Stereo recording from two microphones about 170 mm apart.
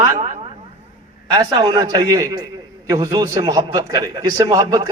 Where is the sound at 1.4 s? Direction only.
25° right (ahead or behind).